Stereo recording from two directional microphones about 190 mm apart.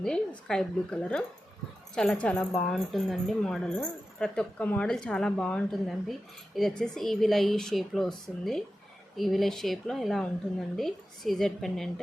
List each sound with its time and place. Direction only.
0.0 s speech: 5° left (ahead or behind)